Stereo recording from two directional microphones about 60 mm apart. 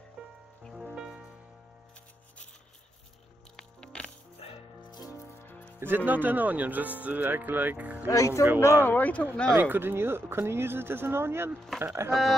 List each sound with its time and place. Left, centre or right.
0.7 s music: centre
3.5 s music: centre
5.5 s music: left
5.8 s speech: right
8.1 s speech: left
8.8 s speech: left
9.5 s speech: right